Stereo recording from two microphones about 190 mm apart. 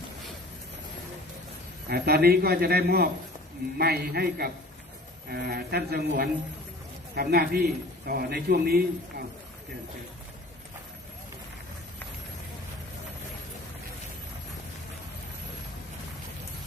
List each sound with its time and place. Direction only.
1.9 s a man's voice: 55° right (ahead or behind)